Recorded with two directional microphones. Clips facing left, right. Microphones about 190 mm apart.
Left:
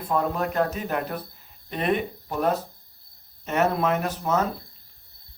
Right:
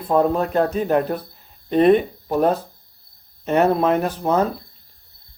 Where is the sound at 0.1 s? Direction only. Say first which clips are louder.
Right 7 dB; 30° right (ahead or behind).